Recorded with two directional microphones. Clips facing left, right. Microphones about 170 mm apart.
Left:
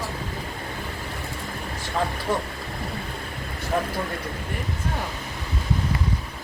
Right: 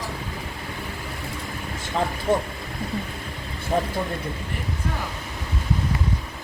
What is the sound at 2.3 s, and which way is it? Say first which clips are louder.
Speech: right 5 dB; 25° right (ahead or behind).